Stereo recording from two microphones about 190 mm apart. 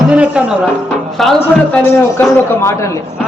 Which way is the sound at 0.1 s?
5° right (ahead or behind).